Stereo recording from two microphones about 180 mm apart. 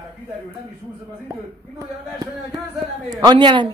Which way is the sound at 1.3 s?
20° right (ahead or behind).